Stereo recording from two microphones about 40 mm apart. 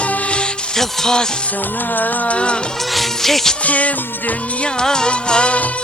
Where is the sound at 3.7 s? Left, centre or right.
Left.